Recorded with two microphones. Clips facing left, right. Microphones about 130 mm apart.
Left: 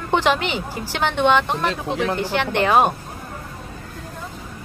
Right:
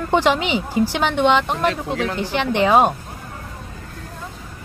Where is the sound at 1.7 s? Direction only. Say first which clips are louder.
Even; 20° left (ahead or behind).